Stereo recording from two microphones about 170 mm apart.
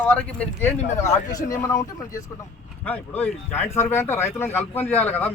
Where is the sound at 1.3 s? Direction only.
20° left (ahead or behind).